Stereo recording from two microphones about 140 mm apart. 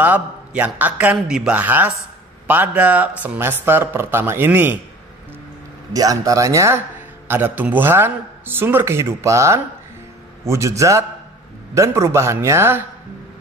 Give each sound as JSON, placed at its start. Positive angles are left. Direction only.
{"t": 0.0, "sound": "a man's voice", "side_deg": -10}
{"t": 5.9, "sound": "a man's voice", "side_deg": -25}